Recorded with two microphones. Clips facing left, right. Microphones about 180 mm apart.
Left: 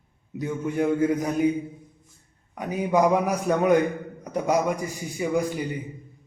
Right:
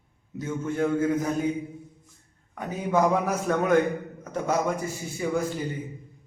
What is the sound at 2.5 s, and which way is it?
A man's voice, 15° left (ahead or behind).